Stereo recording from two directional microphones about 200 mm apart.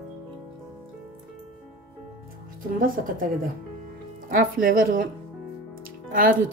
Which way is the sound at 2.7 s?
45° right (ahead or behind).